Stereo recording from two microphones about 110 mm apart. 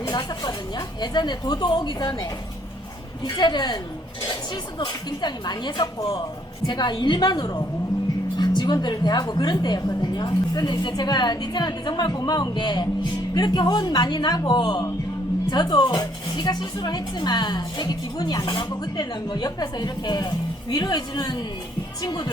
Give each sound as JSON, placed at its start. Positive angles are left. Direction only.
{"t": 0.0, "sound": "a sound", "side_deg": 40}
{"t": 1.0, "sound": "speech", "side_deg": 40}
{"t": 3.2, "sound": "speech", "side_deg": 40}
{"t": 4.8, "sound": "speech", "side_deg": 40}